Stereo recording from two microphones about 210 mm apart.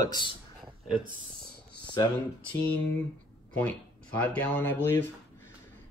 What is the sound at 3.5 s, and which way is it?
Speech, 5° left (ahead or behind).